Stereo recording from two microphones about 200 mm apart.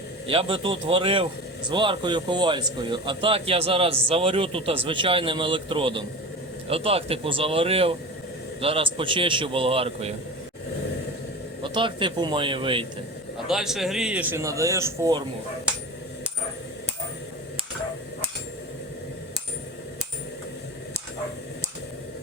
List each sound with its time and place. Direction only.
0.3 s speech: 25° right (ahead or behind)
11.6 s speech: 25° right (ahead or behind)
13.5 s a man's voice: centre (ahead or behind)